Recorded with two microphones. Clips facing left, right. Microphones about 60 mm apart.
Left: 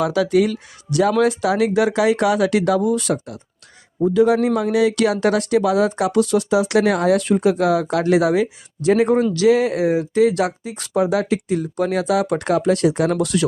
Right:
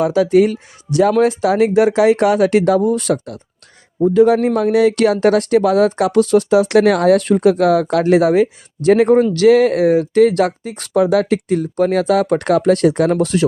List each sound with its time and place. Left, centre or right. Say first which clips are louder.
0.0 s speech: right 4 dB; right
13.1 s speech: right 4 dB; right